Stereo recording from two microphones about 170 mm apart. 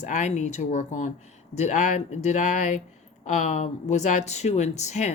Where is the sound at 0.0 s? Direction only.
45° left (ahead or behind).